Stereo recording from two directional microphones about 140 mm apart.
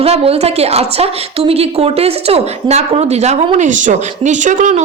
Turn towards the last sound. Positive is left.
turn(degrees=-65)  # may be behind; listen again after turning